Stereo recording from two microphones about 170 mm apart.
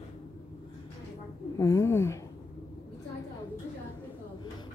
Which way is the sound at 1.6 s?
15° left (ahead or behind).